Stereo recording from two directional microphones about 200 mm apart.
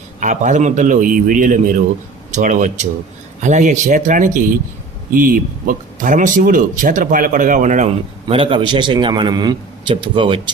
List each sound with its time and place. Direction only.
0.2 s speech: 40° right (ahead or behind)
8.3 s a man's voice: 25° right (ahead or behind)